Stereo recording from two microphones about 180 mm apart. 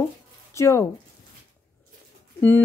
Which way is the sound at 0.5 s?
15° left (ahead or behind).